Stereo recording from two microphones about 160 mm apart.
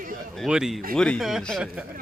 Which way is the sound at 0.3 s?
5° right (ahead or behind).